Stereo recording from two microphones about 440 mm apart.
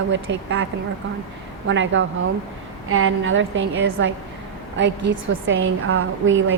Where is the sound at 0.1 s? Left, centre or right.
Right.